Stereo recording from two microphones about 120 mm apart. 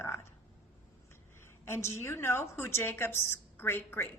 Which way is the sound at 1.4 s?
20° left (ahead or behind).